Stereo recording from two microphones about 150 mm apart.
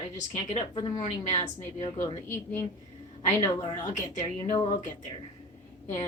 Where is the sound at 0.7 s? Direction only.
30° left (ahead or behind).